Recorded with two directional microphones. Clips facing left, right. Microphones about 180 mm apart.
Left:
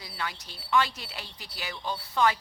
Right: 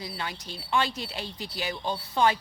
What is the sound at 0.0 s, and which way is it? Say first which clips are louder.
Speech: right 2 dB; 25° right (ahead or behind).